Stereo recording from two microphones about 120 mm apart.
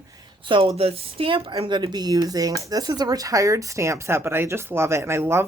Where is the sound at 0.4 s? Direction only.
45° right (ahead or behind).